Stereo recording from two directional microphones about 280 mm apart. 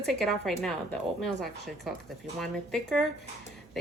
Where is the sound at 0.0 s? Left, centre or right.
Centre.